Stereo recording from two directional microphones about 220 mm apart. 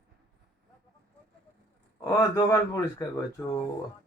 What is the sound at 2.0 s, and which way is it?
Speech, 15° left (ahead or behind).